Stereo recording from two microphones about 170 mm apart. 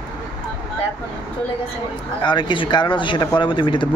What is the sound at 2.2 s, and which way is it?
Speech, 25° left (ahead or behind).